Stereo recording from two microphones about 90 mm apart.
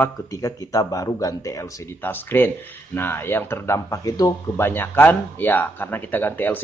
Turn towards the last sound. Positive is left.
turn(degrees=20)  # may be behind; listen again after turning